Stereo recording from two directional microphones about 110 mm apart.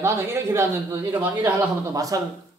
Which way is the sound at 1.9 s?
30° right (ahead or behind).